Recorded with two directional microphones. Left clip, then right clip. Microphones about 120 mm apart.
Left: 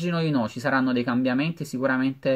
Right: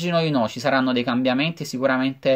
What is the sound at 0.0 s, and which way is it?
Speech, 30° left (ahead or behind).